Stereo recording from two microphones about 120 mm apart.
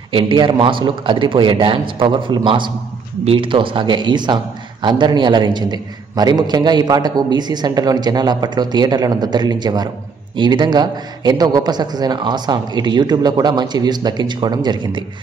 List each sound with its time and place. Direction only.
0.1 s a man's voice: 45° right (ahead or behind)